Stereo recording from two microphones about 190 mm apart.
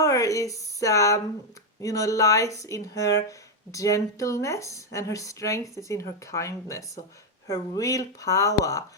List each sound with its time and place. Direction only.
0.0 s speech: 15° left (ahead or behind)